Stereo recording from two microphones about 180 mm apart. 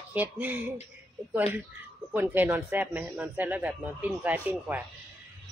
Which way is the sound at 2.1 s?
10° right (ahead or behind).